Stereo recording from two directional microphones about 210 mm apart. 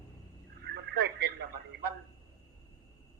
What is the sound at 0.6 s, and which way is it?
Radio, 50° right (ahead or behind).